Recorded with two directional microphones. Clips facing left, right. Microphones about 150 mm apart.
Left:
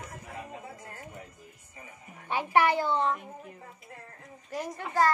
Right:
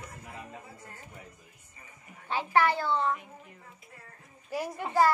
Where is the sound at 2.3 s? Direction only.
15° left (ahead or behind).